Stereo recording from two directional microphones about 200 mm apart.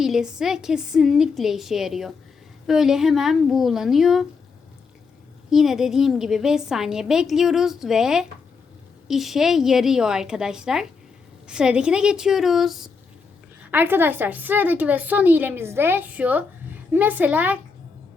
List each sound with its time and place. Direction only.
0.0 s a woman's voice: centre (ahead or behind)
5.5 s a woman's voice: centre (ahead or behind)